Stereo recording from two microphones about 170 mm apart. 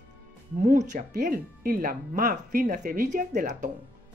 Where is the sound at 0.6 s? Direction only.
45° right (ahead or behind).